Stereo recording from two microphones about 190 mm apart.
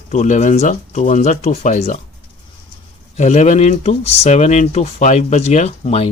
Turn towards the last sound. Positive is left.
turn(degrees=35)  # may be behind; listen again after turning